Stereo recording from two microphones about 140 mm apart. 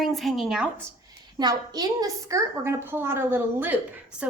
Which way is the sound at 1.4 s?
30° right (ahead or behind).